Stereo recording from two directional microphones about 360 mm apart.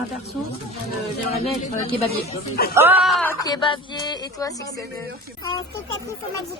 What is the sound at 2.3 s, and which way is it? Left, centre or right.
Speech, left.